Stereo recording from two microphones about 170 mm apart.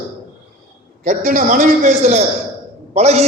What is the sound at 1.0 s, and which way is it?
A man's voice, 50° right (ahead or behind).